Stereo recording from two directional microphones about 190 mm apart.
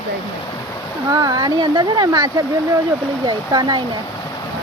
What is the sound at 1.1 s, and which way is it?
Speech, 20° right (ahead or behind).